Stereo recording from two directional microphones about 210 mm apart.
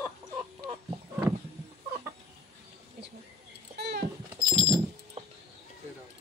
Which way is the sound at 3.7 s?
50° right (ahead or behind).